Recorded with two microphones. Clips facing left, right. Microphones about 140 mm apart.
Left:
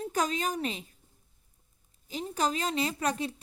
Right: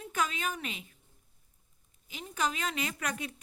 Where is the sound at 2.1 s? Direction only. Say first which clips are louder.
Left 4 dB; 35° left (ahead or behind).